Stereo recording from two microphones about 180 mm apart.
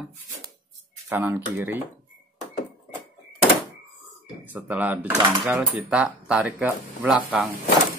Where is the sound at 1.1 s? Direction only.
10° right (ahead or behind).